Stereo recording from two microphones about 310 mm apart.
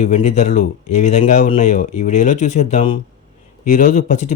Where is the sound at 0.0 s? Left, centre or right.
Left.